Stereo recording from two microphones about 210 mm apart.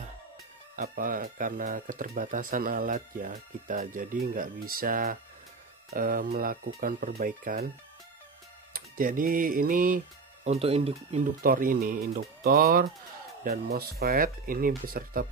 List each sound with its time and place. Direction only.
0.7 s speech: 40° right (ahead or behind)
8.7 s speech: 40° right (ahead or behind)
11.4 s speech: 45° right (ahead or behind)